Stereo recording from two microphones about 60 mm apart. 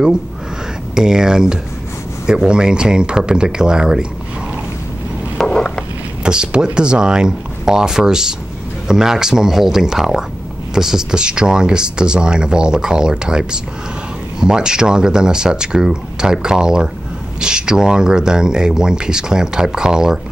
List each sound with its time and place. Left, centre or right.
0.9 s speech: centre
5.5 s a sound: centre
6.2 s speech: centre